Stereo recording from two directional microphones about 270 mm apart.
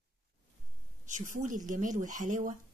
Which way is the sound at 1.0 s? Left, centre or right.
Right.